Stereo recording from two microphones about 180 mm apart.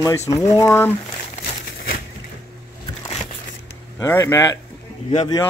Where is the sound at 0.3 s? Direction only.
15° left (ahead or behind).